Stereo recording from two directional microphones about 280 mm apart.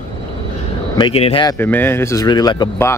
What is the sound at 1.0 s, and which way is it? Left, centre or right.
Speech, left.